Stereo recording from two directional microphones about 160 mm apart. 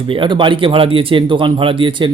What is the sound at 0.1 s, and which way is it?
Speech, 30° right (ahead or behind).